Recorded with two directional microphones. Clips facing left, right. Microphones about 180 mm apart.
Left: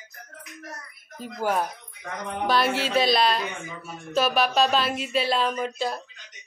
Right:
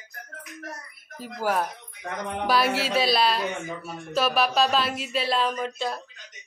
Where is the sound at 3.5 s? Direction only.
40° right (ahead or behind).